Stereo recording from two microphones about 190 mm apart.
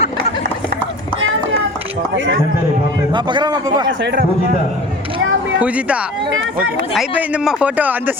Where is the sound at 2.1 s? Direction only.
75° right (ahead or behind).